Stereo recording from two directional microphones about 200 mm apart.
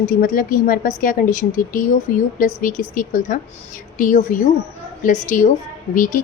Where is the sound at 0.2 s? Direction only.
45° left (ahead or behind).